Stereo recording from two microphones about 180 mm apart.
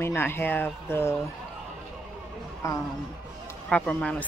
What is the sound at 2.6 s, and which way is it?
Speech, 15° left (ahead or behind).